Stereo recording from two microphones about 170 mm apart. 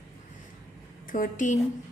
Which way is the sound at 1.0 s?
50° left (ahead or behind).